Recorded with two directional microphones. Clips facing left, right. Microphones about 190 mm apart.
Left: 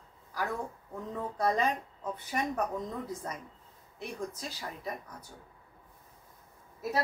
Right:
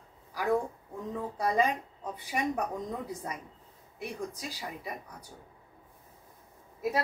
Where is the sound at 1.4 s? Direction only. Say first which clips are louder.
Right 2 dB; 10° right (ahead or behind).